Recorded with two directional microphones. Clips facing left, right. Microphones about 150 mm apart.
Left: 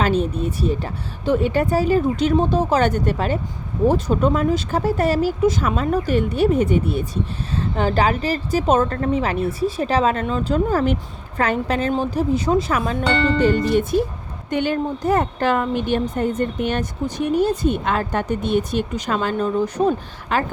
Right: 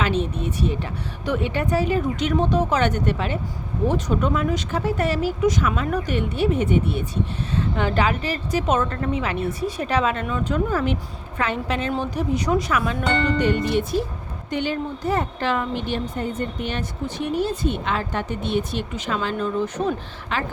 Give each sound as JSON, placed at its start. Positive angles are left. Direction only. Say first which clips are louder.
{"t": 0.0, "sound": "speech", "louder": "left 4 dB", "side_deg": 35}
{"t": 11.9, "sound": "speech", "louder": "left 4 dB", "side_deg": 25}
{"t": 14.5, "sound": "speech", "louder": "left 4 dB", "side_deg": 50}